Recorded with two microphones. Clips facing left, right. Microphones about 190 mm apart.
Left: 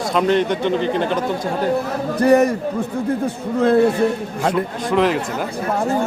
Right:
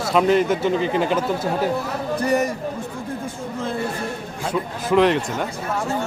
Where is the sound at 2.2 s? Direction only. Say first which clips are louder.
Left 8 dB; 60° left (ahead or behind).